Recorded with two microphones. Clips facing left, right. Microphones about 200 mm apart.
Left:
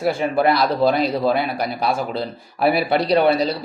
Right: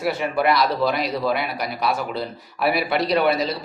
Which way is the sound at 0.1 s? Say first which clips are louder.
Left 3 dB; 30° left (ahead or behind).